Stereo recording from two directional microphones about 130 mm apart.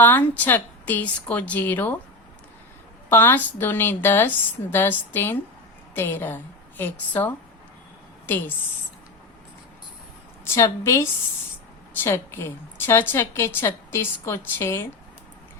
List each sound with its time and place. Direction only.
0.0 s a woman's voice: 15° left (ahead or behind)
3.1 s a woman's voice: 15° left (ahead or behind)
10.4 s a woman's voice: 20° left (ahead or behind)